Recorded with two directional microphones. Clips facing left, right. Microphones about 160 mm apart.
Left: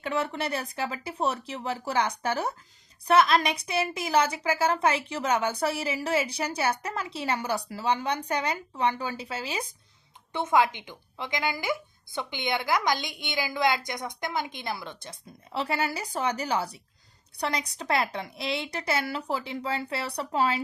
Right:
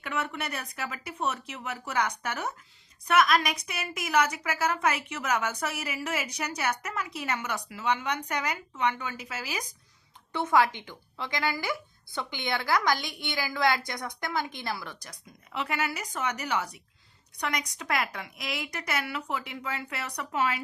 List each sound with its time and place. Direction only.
0.0 s a woman's voice: 30° left (ahead or behind)